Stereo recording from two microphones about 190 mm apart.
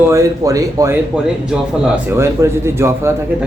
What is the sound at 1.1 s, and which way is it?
A man's voice, 5° right (ahead or behind).